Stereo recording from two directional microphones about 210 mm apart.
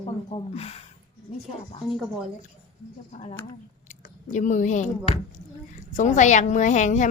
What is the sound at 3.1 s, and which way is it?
A woman's voice, 30° left (ahead or behind).